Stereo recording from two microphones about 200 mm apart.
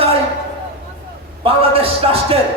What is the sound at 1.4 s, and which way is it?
Speech, 30° right (ahead or behind).